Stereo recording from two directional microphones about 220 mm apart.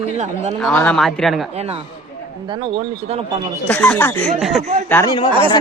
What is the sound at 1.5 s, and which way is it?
Speech, 30° right (ahead or behind).